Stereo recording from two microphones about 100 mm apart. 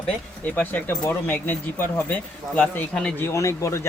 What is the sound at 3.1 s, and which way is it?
Speech, 30° left (ahead or behind).